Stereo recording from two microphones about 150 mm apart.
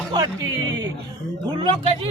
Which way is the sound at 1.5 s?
40° right (ahead or behind).